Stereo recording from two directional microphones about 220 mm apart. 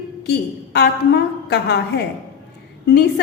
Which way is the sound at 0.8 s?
50° left (ahead or behind).